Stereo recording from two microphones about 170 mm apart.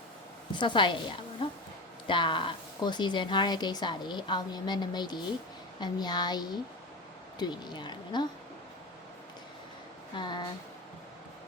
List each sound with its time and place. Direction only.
0.5 s a woman's voice: 30° left (ahead or behind)
2.0 s a woman's voice: 30° left (ahead or behind)
10.2 s a woman's voice: 25° left (ahead or behind)